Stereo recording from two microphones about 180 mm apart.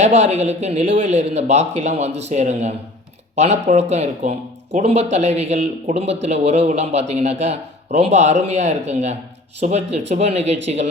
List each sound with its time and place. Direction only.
0.0 s a man's voice: 40° right (ahead or behind)